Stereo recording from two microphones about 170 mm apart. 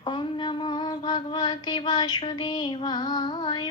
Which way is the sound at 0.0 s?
30° left (ahead or behind).